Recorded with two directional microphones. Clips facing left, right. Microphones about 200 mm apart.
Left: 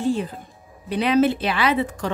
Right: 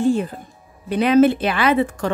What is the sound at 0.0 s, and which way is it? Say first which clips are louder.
A woman's voice: right 4 dB; 50° right (ahead or behind).